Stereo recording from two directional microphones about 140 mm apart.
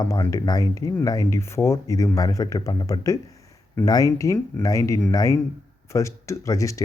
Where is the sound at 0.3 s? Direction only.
25° left (ahead or behind).